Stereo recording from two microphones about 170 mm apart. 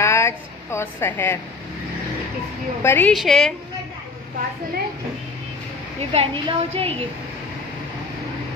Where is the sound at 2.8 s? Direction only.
10° left (ahead or behind).